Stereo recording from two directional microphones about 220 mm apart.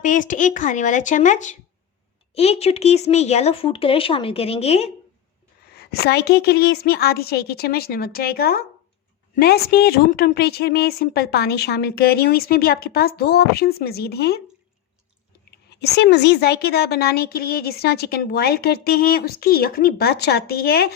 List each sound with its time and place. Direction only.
0.0 s speech: 35° left (ahead or behind)
5.8 s a woman's voice: 45° left (ahead or behind)
15.4 s a woman's voice: 45° left (ahead or behind)